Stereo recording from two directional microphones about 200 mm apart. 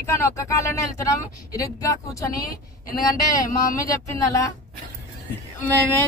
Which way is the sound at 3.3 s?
15° left (ahead or behind).